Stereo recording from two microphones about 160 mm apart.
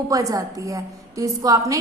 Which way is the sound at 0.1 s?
20° right (ahead or behind).